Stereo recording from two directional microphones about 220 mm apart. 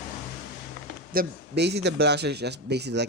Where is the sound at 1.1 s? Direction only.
50° right (ahead or behind).